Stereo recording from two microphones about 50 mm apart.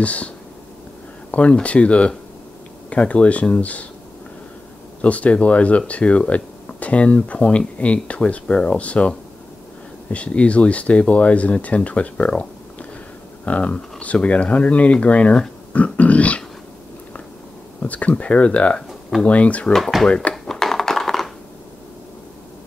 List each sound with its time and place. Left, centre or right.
0.0 s speech: left
1.3 s speech: left
5.0 s speech: left
12.3 s a sound: left
13.5 s speech: left
15.7 s dog: left
17.8 s speech: left
18.9 s a sound: centre
19.2 s speech: left
19.7 s speech: centre
20.4 s computer keyboard: centre